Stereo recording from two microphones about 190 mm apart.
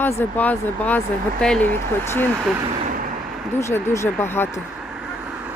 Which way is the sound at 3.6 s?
15° left (ahead or behind).